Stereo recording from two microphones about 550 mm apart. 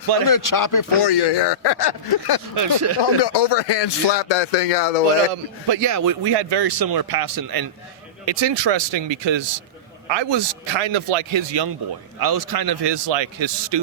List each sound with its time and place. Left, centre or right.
0.3 s speech: left
2.6 s speech: right
3.0 s speech: left
5.6 s a man's voice: right
12.2 s a man's voice: right